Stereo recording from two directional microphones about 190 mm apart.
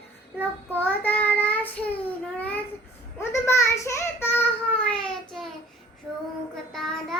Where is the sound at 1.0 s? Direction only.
10° left (ahead or behind).